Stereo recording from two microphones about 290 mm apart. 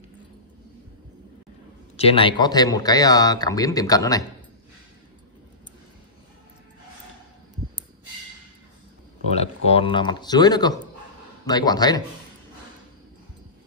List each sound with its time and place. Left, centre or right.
2.0 s speech: centre
9.3 s speech: left